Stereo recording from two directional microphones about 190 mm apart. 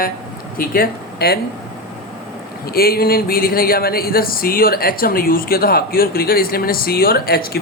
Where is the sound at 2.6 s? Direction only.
55° left (ahead or behind).